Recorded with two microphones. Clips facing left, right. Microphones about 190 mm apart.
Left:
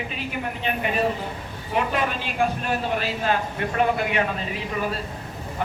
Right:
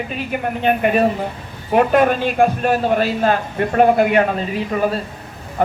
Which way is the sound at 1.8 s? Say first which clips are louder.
Right 11 dB; 55° right (ahead or behind).